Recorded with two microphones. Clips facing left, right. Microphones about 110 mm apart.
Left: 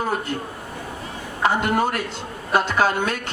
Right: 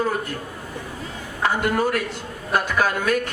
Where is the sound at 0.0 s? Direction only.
25° left (ahead or behind).